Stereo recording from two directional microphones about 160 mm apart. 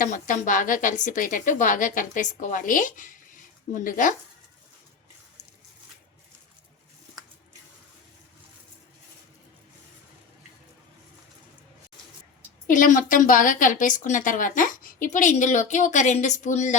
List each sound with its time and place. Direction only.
0.0 s a woman's voice: 50° left (ahead or behind)
12.6 s a woman's voice: 55° left (ahead or behind)